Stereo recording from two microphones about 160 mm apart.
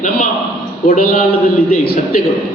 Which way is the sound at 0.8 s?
60° left (ahead or behind).